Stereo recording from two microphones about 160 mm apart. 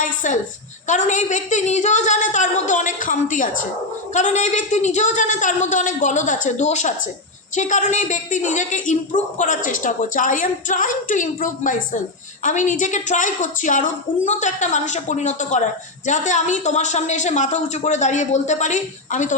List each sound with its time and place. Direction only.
0.0 s a woman's voice: 50° left (ahead or behind)